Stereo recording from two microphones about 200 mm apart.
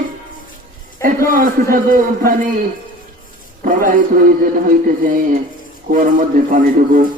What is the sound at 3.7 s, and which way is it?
Speech, 45° right (ahead or behind).